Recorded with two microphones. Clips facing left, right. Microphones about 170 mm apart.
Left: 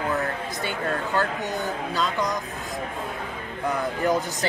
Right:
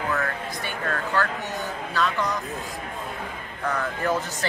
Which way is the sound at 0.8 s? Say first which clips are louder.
Even; 25° left (ahead or behind).